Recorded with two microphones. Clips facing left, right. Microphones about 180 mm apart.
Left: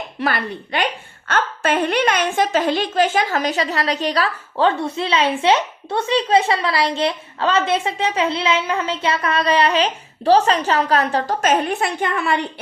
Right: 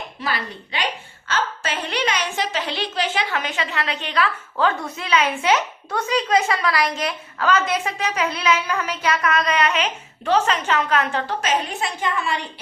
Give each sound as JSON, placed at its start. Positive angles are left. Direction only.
{"t": 0.2, "sound": "a woman's voice", "side_deg": 60}